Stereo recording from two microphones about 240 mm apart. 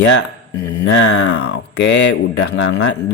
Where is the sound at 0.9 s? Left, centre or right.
Left.